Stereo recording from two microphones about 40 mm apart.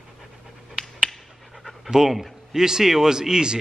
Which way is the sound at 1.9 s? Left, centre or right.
Centre.